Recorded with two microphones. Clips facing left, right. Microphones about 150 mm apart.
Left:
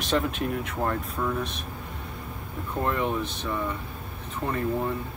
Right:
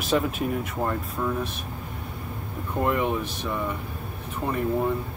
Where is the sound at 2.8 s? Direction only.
10° right (ahead or behind).